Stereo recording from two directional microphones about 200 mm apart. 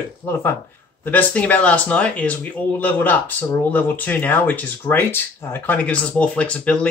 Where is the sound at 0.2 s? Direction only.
10° left (ahead or behind).